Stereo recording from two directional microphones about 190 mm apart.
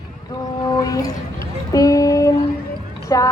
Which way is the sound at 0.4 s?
20° left (ahead or behind).